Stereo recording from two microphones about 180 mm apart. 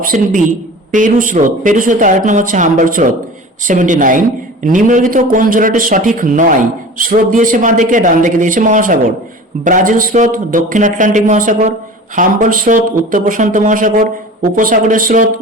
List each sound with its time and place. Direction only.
0.0 s speech: 50° right (ahead or behind)